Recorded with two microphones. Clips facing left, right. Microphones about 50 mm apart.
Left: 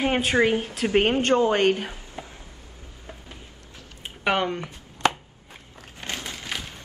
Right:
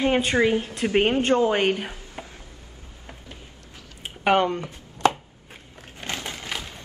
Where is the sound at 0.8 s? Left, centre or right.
Centre.